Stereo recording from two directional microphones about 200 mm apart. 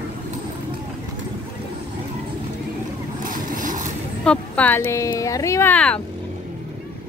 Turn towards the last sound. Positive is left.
turn(degrees=5)  # may be behind; listen again after turning